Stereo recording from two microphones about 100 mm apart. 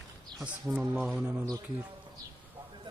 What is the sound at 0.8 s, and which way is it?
Speech, 15° right (ahead or behind).